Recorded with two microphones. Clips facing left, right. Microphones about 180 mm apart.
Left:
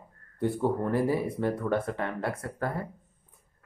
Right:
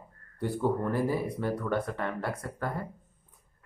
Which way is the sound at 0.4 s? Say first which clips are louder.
Left 1 dB; 25° left (ahead or behind).